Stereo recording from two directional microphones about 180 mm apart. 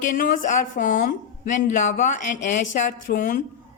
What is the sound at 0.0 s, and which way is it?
A woman's voice, 45° left (ahead or behind).